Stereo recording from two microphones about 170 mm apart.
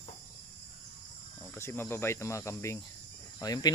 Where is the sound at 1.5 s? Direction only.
15° left (ahead or behind).